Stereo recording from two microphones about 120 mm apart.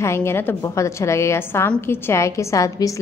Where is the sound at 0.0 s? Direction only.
20° left (ahead or behind).